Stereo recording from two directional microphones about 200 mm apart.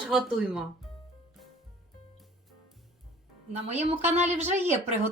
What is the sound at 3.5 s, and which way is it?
Speech, 35° right (ahead or behind).